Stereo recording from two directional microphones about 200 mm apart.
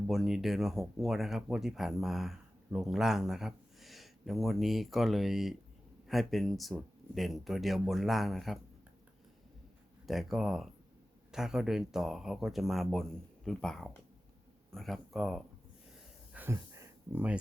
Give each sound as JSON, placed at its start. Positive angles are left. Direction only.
{"t": 0.1, "sound": "speech", "side_deg": 0}
{"t": 10.1, "sound": "speech", "side_deg": 0}
{"t": 16.3, "sound": "a sound", "side_deg": -10}